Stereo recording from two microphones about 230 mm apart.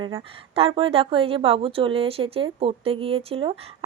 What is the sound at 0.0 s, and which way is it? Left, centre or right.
Speech, right.